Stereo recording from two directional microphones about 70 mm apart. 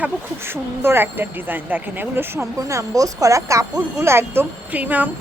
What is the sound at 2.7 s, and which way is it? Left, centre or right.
Speech, right.